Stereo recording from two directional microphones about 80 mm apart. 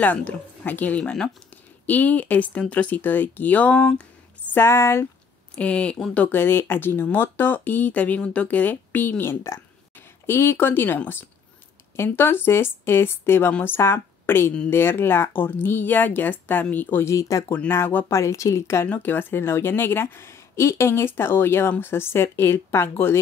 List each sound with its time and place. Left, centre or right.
0.0 s speech: centre
1.9 s speech: left
4.6 s a woman's voice: left
5.6 s speech: centre
9.2 s a woman's voice: left
13.7 s a woman's voice: left
17.1 s speech: left
17.6 s a woman's voice: left
18.9 s a woman's voice: left